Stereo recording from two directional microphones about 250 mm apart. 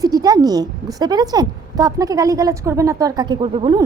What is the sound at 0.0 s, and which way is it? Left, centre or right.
Speech, centre.